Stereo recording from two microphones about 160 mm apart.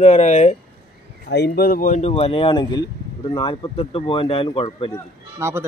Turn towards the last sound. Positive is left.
turn(degrees=-15)  # may be behind; listen again after turning